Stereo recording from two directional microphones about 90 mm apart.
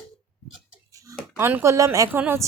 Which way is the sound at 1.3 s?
25° right (ahead or behind).